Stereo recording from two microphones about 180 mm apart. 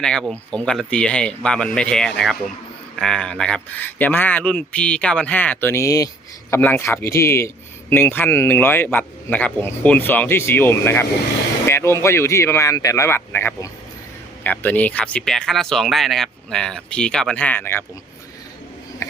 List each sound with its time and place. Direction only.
0.0 s a man's voice: 5° left (ahead or behind)